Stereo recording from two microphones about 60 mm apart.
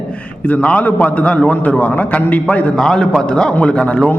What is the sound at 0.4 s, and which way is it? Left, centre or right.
A man's voice, left.